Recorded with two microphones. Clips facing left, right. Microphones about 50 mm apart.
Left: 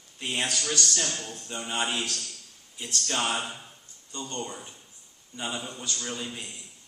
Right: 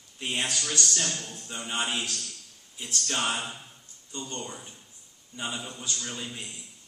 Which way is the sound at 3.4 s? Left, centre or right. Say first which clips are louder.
Left 1 dB; centre.